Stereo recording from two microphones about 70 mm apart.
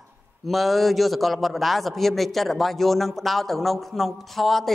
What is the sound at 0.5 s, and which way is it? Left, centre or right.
A man's voice, centre.